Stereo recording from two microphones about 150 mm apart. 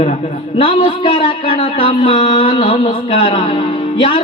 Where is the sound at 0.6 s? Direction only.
35° left (ahead or behind).